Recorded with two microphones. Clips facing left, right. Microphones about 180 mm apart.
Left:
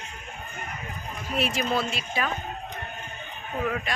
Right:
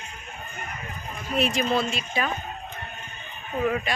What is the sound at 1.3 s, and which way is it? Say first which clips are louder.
Speech: right 3 dB; 5° left (ahead or behind).